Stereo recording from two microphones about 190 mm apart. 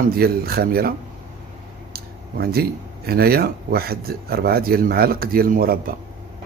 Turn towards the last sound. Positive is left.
turn(degrees=-50)  # may be behind; listen again after turning